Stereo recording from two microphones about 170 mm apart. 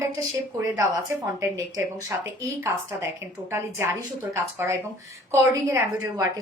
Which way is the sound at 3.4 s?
15° right (ahead or behind).